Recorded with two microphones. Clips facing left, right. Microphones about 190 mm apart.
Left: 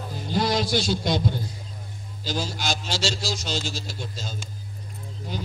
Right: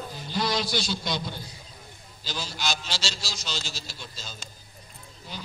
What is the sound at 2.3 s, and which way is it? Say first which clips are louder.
A man's voice: left 4 dB; 45° left (ahead or behind).